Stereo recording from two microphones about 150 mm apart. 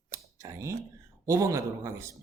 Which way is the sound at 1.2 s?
20° right (ahead or behind).